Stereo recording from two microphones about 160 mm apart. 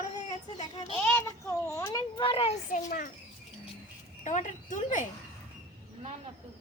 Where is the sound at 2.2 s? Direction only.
35° left (ahead or behind).